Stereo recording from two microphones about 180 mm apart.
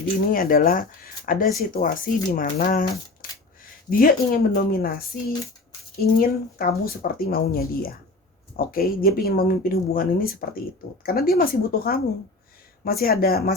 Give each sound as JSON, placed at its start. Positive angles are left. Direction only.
{"t": 0.3, "sound": "speech", "side_deg": 50}
{"t": 3.2, "sound": "a sound", "side_deg": 50}
{"t": 3.8, "sound": "speech", "side_deg": 50}